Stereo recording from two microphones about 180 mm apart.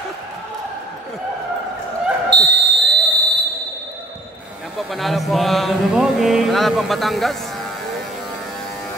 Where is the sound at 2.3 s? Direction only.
75° right (ahead or behind).